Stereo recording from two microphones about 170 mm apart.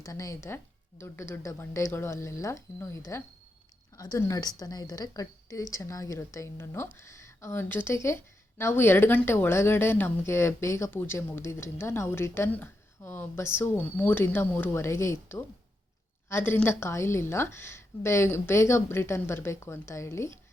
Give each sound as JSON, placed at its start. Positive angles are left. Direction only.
{"t": 0.0, "sound": "a woman's voice", "side_deg": 20}